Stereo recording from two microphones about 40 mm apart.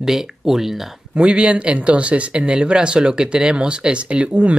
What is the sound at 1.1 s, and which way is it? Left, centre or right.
Speech, right.